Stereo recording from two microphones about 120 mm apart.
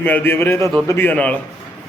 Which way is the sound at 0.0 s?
15° left (ahead or behind).